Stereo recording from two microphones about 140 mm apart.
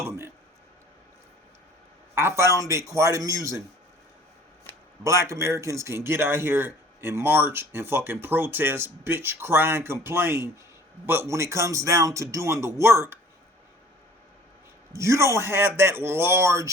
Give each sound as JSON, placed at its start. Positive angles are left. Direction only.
{"t": 0.0, "sound": "a sound", "side_deg": -15}
{"t": 2.1, "sound": "speech", "side_deg": -20}
{"t": 5.0, "sound": "speech", "side_deg": -20}
{"t": 14.9, "sound": "speech", "side_deg": -20}